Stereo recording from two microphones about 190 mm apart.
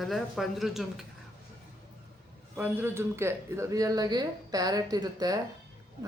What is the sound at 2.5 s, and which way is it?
Speech, 10° right (ahead or behind).